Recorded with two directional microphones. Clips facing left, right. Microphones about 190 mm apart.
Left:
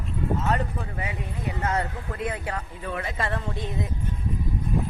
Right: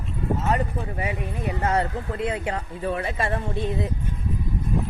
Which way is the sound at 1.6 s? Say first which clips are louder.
Right 4 dB; 30° right (ahead or behind).